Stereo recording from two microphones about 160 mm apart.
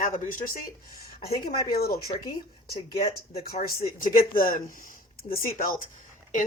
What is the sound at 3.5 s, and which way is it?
Speech, 65° left (ahead or behind).